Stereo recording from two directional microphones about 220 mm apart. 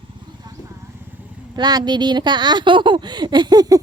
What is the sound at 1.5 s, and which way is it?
A woman's voice, 20° right (ahead or behind).